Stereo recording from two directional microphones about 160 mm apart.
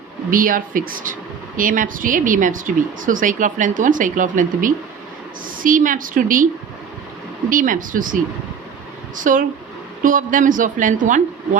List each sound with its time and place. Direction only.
0.3 s speech: 60° right (ahead or behind)
7.5 s speech: 55° right (ahead or behind)